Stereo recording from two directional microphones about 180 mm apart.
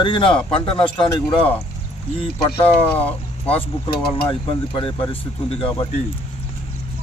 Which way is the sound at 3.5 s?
30° left (ahead or behind).